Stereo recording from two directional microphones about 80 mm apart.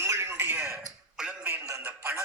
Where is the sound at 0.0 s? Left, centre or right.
Right.